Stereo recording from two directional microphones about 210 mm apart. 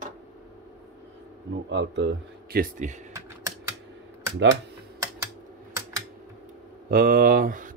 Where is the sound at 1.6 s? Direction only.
55° right (ahead or behind); by 2.9 s 40° right (ahead or behind).